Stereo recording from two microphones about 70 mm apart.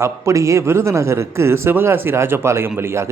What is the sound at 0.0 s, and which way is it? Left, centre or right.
A man's voice, right.